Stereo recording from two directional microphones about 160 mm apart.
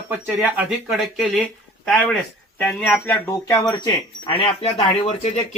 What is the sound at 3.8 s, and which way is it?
Speech, 30° left (ahead or behind).